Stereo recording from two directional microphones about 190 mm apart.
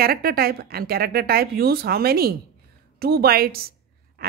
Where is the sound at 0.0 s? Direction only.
50° right (ahead or behind).